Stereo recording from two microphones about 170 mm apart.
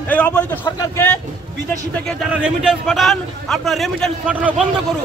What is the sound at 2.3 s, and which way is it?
A man's voice, 5° right (ahead or behind).